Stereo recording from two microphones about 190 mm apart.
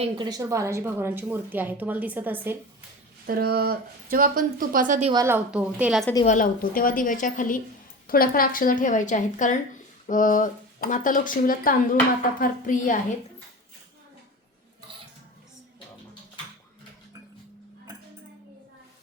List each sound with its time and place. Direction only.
0.0 s a woman's voice: 20° right (ahead or behind)
3.2 s speech: 55° right (ahead or behind)
5.1 s a woman's voice: 15° right (ahead or behind)
6.2 s speech: 45° left (ahead or behind)